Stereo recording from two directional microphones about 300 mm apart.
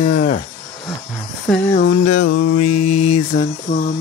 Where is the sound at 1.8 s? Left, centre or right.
Left.